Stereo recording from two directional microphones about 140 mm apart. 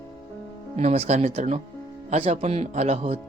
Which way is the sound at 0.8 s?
50° right (ahead or behind).